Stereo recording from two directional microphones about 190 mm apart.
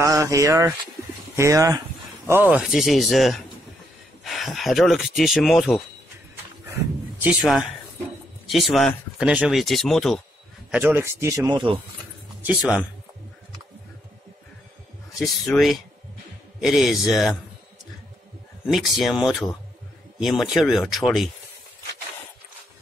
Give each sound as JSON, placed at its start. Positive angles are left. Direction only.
{"t": 0.0, "sound": "speech", "side_deg": -15}
{"t": 7.2, "sound": "speech", "side_deg": 0}
{"t": 10.7, "sound": "speech", "side_deg": -10}
{"t": 12.4, "sound": "speech", "side_deg": -5}
{"t": 15.1, "sound": "speech", "side_deg": 0}
{"t": 18.7, "sound": "speech", "side_deg": 0}